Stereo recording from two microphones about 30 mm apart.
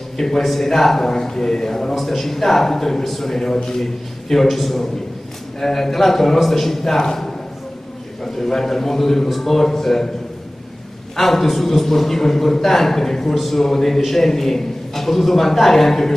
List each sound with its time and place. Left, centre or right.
0.4 s a man's voice: centre
11.1 s a man's voice: centre